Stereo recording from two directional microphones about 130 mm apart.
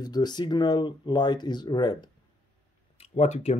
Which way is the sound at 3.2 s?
60° left (ahead or behind).